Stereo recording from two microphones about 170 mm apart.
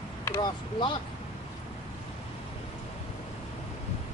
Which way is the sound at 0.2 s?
15° left (ahead or behind).